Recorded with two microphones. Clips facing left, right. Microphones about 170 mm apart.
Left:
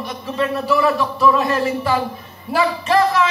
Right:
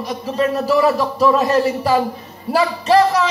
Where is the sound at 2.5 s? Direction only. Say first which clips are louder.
Right 3 dB; 40° right (ahead or behind).